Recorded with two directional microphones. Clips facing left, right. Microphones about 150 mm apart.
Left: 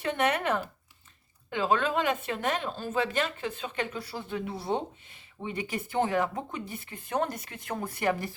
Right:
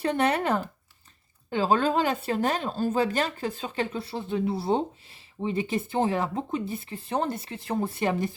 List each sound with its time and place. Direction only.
0.0 s speech: 35° right (ahead or behind)